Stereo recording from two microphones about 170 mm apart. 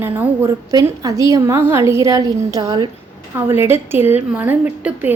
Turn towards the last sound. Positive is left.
turn(degrees=-10)  # may be behind; listen again after turning